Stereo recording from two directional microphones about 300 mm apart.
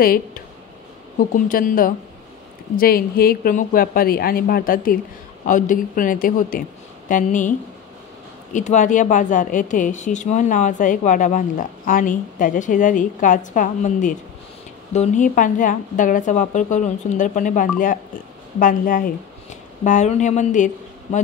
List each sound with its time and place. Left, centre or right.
0.0 s speech: left
8.5 s speech: left